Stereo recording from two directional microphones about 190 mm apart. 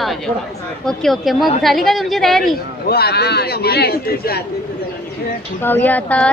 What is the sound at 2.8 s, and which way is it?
A man's voice, 55° left (ahead or behind).